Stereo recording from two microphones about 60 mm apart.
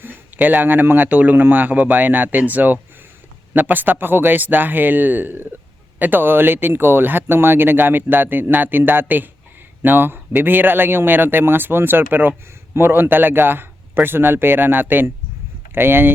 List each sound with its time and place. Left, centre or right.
0.3 s speech: right